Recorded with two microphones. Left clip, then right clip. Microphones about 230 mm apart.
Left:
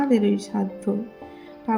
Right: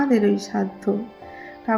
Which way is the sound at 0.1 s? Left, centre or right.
Centre.